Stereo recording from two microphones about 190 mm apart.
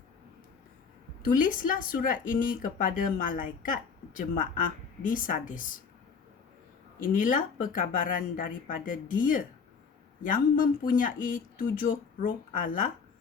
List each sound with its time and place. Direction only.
1.2 s speech: 45° left (ahead or behind)
7.0 s speech: 45° left (ahead or behind)